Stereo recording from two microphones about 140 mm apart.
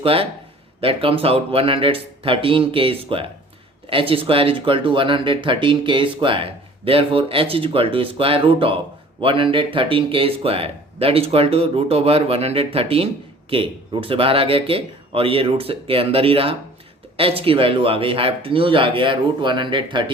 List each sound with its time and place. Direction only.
0.0 s speech: 40° right (ahead or behind)